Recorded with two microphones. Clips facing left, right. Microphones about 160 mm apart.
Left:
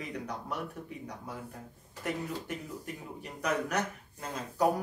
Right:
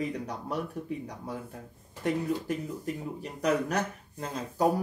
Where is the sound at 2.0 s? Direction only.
30° right (ahead or behind).